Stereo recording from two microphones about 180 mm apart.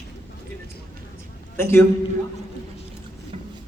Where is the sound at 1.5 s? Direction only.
15° left (ahead or behind).